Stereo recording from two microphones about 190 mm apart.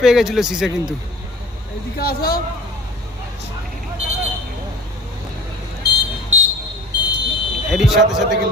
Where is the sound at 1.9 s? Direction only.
55° left (ahead or behind).